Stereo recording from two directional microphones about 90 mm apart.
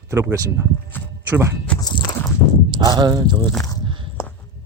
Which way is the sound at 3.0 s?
55° right (ahead or behind).